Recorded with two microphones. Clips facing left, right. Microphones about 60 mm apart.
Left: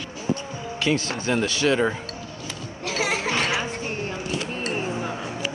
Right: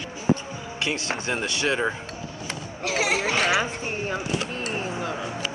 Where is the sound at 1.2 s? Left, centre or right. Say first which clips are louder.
Left 5 dB; right.